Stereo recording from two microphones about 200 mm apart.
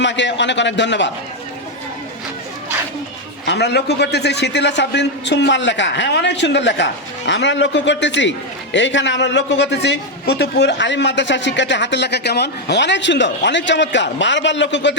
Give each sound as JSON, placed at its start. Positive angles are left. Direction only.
{"t": 0.0, "sound": "a man's voice", "side_deg": 65}
{"t": 3.4, "sound": "a man's voice", "side_deg": 55}